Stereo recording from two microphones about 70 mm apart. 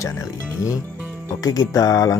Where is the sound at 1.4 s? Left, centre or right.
Left.